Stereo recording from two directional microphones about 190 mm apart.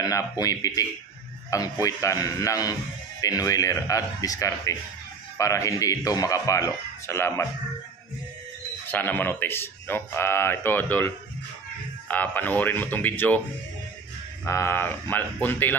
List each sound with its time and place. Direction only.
0.0 s speech: 20° left (ahead or behind)
8.8 s speech: 10° left (ahead or behind)
14.4 s speech: 15° left (ahead or behind)